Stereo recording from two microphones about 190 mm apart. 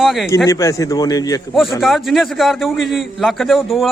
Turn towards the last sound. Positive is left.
turn(degrees=0)  # may be behind; listen again after turning